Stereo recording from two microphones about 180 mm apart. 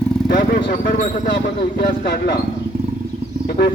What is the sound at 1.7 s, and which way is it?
Speech, 60° left (ahead or behind).